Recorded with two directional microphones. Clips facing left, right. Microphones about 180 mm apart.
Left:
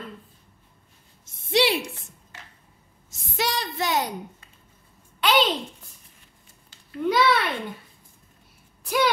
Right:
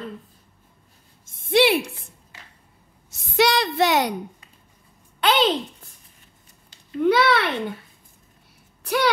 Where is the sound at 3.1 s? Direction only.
70° right (ahead or behind).